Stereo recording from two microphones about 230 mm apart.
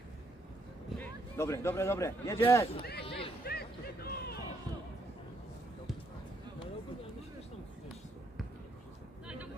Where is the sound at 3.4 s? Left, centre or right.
Left.